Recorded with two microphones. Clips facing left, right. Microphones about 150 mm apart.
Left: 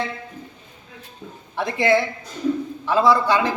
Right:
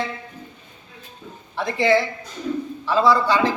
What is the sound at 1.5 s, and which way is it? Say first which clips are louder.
Speech: even; 5° left (ahead or behind).